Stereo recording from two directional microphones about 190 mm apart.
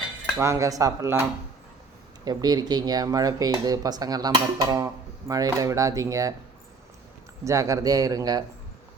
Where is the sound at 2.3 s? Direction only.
20° right (ahead or behind).